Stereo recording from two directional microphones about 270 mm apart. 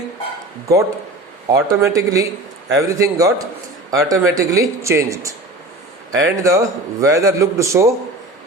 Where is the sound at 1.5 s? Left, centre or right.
Centre.